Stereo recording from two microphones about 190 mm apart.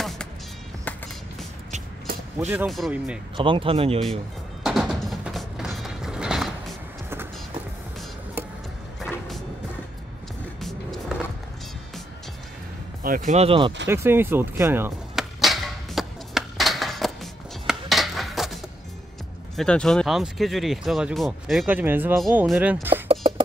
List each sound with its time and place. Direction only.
2.4 s speech: 10° right (ahead or behind)
3.3 s speech: 25° right (ahead or behind)
4.6 s music: centre (ahead or behind)
10.6 s vehicle: centre (ahead or behind)
13.0 s speech: 45° right (ahead or behind); by 13.7 s 25° right (ahead or behind)
13.8 s speech: 10° right (ahead or behind)
15.4 s a sound: centre (ahead or behind)
19.5 s speech: 5° left (ahead or behind)
23.0 s music: 30° right (ahead or behind)